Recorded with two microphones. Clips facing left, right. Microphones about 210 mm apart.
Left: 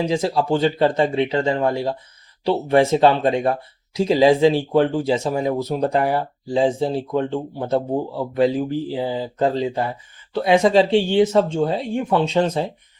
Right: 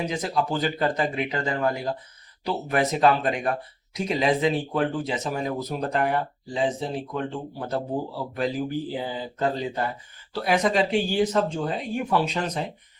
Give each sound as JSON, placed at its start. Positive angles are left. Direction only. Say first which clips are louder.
{"t": 0.0, "sound": "speech", "louder": "left 6 dB", "side_deg": 30}